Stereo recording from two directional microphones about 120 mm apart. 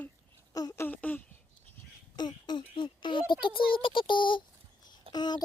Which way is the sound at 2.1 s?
35° left (ahead or behind).